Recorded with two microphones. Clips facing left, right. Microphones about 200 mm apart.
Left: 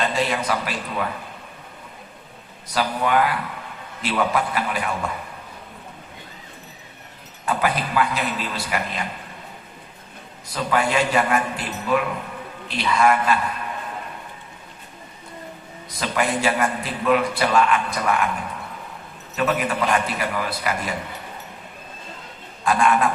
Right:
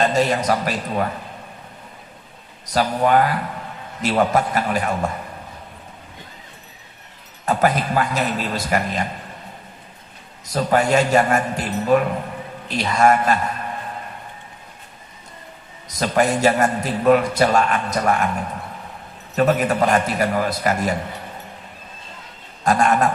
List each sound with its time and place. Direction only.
0.0 s a man's voice: 45° right (ahead or behind)
2.6 s a man's voice: 40° right (ahead or behind)
7.4 s a man's voice: 45° right (ahead or behind)
10.4 s a man's voice: 40° right (ahead or behind)
15.9 s a man's voice: 40° right (ahead or behind)
22.6 s a man's voice: 45° right (ahead or behind)